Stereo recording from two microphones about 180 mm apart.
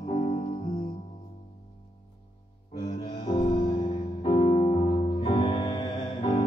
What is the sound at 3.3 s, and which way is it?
Music, 30° left (ahead or behind).